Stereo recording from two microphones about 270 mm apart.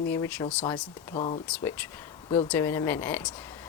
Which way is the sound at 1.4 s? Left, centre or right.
Centre.